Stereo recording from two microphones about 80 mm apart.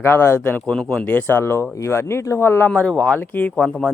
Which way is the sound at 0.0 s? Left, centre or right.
Left.